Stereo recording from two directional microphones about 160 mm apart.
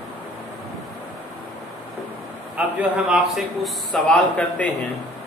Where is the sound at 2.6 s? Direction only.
5° right (ahead or behind).